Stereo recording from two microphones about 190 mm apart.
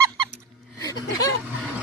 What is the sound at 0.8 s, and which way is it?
Speech, 20° left (ahead or behind).